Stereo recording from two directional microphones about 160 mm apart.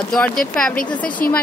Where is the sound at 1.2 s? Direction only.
60° left (ahead or behind).